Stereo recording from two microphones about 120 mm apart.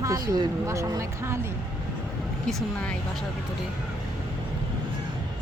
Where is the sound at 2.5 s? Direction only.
Centre (ahead or behind).